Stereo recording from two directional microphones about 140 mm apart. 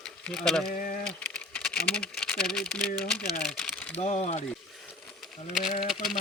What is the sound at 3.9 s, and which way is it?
Speech, 45° left (ahead or behind).